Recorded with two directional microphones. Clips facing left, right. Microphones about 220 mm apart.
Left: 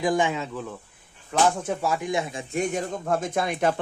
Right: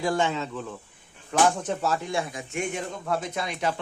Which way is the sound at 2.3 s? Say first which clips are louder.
Left 4 dB; 35° left (ahead or behind).